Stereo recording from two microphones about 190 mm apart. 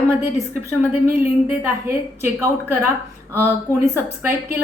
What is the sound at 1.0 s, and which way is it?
A woman's voice, 10° right (ahead or behind).